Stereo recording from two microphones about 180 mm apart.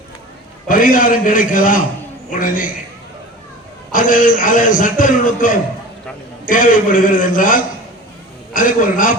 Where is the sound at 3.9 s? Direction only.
50° left (ahead or behind).